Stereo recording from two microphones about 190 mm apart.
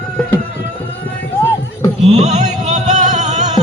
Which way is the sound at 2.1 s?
35° right (ahead or behind).